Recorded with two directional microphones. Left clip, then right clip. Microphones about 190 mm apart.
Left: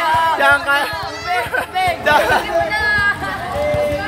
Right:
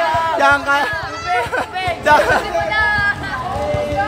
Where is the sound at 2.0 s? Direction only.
20° right (ahead or behind).